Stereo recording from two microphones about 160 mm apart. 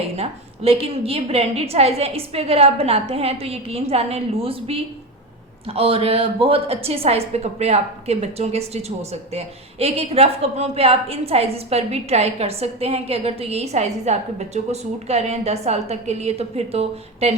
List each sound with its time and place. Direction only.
0.2 s a woman's voice: 35° right (ahead or behind)